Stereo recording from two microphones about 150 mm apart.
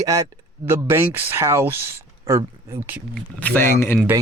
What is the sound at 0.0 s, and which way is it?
Speech, 25° right (ahead or behind).